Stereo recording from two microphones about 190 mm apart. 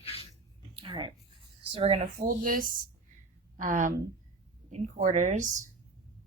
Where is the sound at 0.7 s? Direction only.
25° right (ahead or behind).